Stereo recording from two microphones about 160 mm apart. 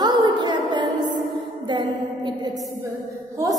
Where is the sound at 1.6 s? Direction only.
30° right (ahead or behind).